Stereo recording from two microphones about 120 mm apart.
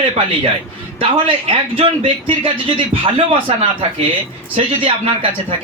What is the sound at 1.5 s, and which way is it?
Speech, 50° right (ahead or behind).